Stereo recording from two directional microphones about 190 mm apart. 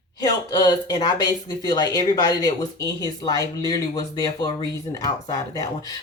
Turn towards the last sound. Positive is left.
turn(degrees=20)  # may be behind; listen again after turning